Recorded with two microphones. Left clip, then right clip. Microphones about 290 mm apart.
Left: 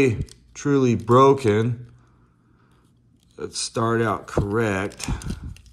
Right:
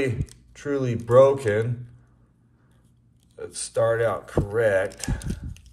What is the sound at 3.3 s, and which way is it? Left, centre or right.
Speech, centre.